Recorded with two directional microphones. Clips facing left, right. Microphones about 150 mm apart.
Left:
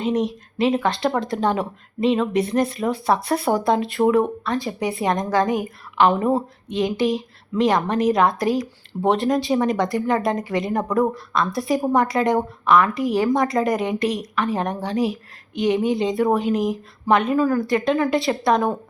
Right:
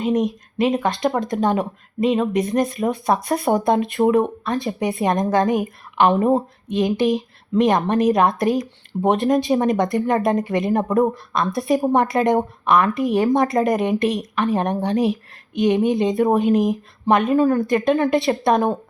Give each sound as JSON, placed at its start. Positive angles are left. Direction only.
{"t": 0.0, "sound": "a woman's voice", "side_deg": -20}